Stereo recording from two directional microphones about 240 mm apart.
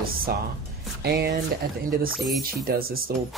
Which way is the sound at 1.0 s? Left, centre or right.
Right.